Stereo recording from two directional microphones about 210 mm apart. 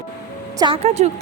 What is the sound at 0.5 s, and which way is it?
Speech, 25° right (ahead or behind).